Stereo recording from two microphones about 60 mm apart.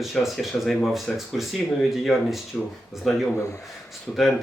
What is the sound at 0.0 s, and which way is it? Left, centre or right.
Speech, centre.